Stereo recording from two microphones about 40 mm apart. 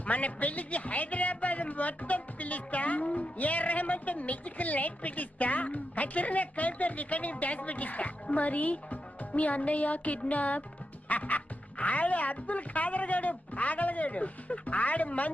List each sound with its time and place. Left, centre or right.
0.0 s a man's voice: left